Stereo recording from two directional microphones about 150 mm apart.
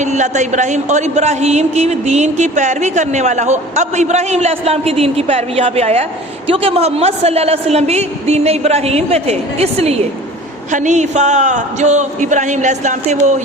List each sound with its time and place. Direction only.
0.0 s speech: 55° right (ahead or behind)
10.7 s speech: 55° right (ahead or behind)